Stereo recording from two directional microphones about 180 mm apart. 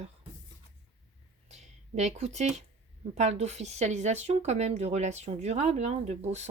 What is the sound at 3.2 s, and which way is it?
Speech, 40° right (ahead or behind).